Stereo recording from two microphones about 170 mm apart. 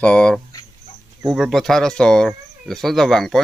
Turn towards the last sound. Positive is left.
turn(degrees=0)  # may be behind; listen again after turning